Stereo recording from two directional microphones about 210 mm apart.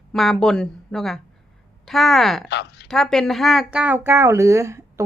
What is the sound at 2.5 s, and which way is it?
Speech, 55° left (ahead or behind).